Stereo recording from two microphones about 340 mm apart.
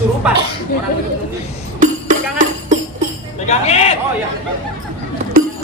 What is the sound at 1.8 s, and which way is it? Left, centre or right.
Music, right.